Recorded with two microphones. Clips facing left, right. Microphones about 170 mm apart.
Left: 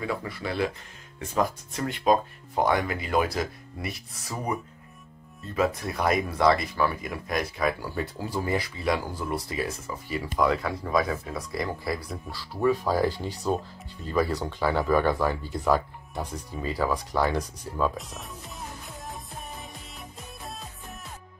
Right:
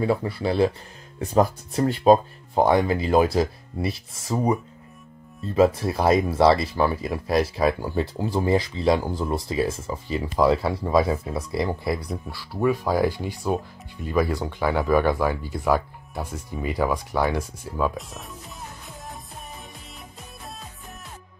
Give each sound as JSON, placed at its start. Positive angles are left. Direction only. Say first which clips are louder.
{"t": 0.0, "sound": "speech", "louder": "right 8 dB", "side_deg": -30}
{"t": 5.8, "sound": "speech", "louder": "right 6 dB", "side_deg": -30}
{"t": 17.7, "sound": "music", "louder": "right 2 dB", "side_deg": -5}